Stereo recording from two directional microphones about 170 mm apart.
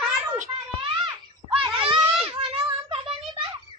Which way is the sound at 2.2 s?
35° right (ahead or behind).